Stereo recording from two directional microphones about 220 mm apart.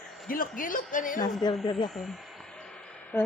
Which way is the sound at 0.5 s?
40° left (ahead or behind).